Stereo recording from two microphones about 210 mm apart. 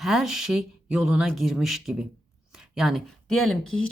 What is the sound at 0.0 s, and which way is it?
Speech, centre (ahead or behind).